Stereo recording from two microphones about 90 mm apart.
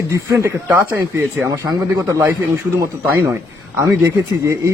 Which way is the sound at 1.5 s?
40° right (ahead or behind).